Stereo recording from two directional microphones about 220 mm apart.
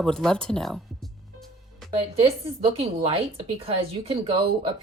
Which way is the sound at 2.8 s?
25° right (ahead or behind).